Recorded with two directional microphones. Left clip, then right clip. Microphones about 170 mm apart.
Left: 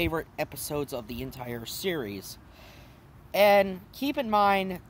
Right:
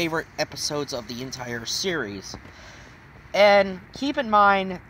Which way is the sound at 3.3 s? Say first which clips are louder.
Right 4 dB; 15° left (ahead or behind).